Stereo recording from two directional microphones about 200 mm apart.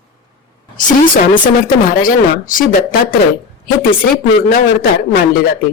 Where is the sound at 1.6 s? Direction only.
45° left (ahead or behind).